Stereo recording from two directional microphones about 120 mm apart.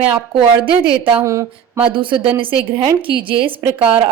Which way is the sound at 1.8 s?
45° right (ahead or behind).